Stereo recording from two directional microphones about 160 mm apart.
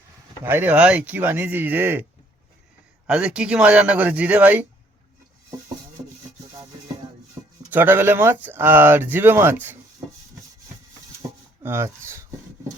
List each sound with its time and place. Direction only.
0.4 s speech: 15° right (ahead or behind)
3.1 s speech: 5° right (ahead or behind)
6.0 s wood: 40° right (ahead or behind)
7.7 s speech: 15° right (ahead or behind)
11.6 s rub: 15° right (ahead or behind)